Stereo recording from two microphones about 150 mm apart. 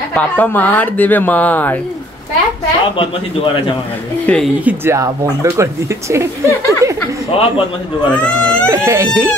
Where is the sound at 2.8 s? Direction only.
35° left (ahead or behind).